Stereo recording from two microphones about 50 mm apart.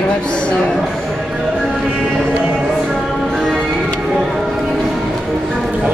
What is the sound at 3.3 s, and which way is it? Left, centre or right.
Music, centre.